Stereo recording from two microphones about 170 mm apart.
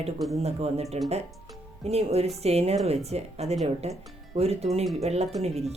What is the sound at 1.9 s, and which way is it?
Speech, 40° right (ahead or behind).